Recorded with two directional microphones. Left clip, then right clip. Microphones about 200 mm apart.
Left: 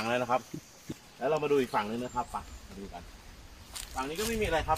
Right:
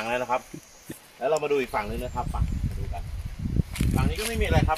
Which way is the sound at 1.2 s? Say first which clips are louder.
Right 4 dB; 20° right (ahead or behind).